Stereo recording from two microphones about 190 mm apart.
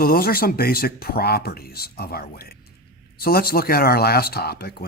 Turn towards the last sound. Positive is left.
turn(degrees=55)  # may be behind; listen again after turning